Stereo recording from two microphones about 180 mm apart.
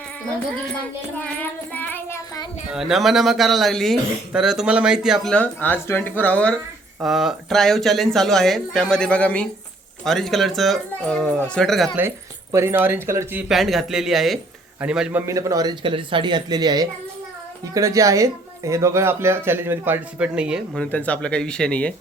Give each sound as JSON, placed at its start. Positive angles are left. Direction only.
{"t": 1.1, "sound": "child singing", "side_deg": 10}
{"t": 2.7, "sound": "speech", "side_deg": 0}
{"t": 7.0, "sound": "speech", "side_deg": 0}
{"t": 11.9, "sound": "speech", "side_deg": -15}
{"t": 13.5, "sound": "speech", "side_deg": 0}
{"t": 15.3, "sound": "speech", "side_deg": -20}
{"t": 20.7, "sound": "speech", "side_deg": 10}